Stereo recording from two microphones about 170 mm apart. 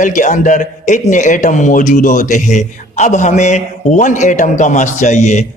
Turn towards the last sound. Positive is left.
turn(degrees=45)  # may be behind; listen again after turning